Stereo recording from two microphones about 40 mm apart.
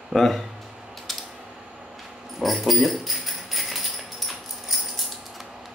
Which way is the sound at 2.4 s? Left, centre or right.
Centre.